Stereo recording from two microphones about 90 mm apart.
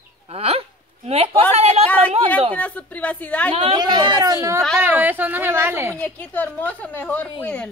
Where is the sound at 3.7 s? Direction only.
55° right (ahead or behind).